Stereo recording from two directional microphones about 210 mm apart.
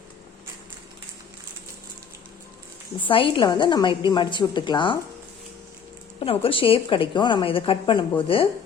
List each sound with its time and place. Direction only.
3.0 s a woman's voice: 25° left (ahead or behind)
6.1 s a woman's voice: 25° left (ahead or behind)